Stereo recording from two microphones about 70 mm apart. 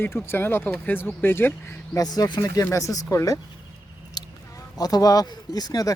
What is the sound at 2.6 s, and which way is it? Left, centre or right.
Speech, left.